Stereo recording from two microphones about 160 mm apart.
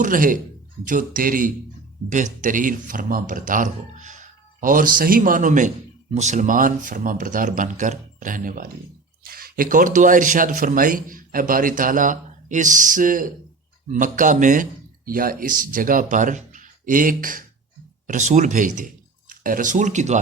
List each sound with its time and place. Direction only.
0.0 s speech: 60° right (ahead or behind)